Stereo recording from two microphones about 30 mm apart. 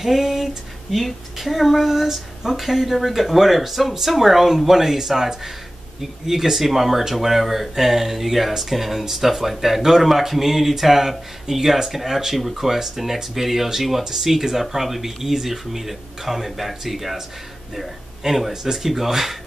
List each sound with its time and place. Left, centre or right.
0.0 s a sound: centre
0.9 s speech: centre
18.2 s speech: centre
18.5 s speech: centre
18.8 s speech: centre